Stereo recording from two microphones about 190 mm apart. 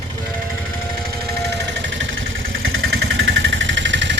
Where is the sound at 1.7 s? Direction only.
70° right (ahead or behind).